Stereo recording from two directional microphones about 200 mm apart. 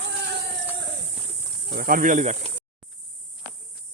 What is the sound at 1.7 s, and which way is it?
Speech, 50° right (ahead or behind).